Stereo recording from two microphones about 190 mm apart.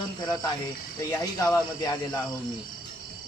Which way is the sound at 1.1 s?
15° left (ahead or behind).